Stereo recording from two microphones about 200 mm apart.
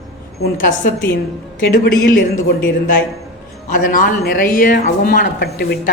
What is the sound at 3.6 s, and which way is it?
Speech, 40° left (ahead or behind).